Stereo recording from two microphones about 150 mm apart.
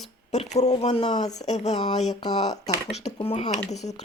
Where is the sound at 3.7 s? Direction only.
50° left (ahead or behind).